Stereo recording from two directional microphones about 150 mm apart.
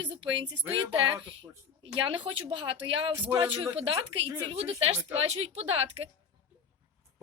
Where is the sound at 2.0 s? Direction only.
35° right (ahead or behind).